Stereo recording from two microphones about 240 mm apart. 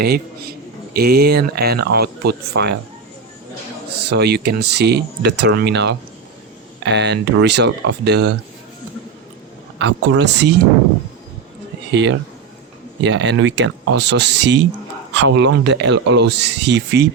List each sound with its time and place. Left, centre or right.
0.0 s speech: right
4.0 s speech: right
9.8 s speech: right
11.9 s speech: right